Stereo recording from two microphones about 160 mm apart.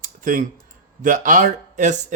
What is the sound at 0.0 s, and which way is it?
Clicking, 55° right (ahead or behind).